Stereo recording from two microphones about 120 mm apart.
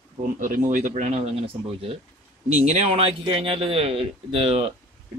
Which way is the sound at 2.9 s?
50° right (ahead or behind).